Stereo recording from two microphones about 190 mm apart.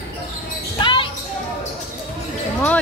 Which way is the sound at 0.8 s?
25° left (ahead or behind).